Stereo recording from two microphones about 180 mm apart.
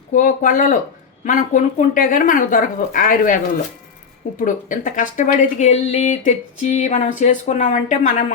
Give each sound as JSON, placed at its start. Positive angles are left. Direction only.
{"t": 0.1, "sound": "speech", "side_deg": 45}